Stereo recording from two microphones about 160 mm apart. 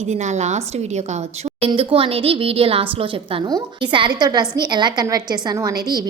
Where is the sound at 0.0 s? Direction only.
45° right (ahead or behind).